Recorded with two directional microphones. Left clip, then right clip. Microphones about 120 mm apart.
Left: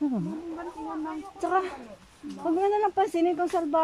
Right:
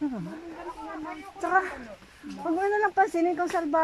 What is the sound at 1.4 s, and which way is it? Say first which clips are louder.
Speech: right 2 dB; 20° left (ahead or behind).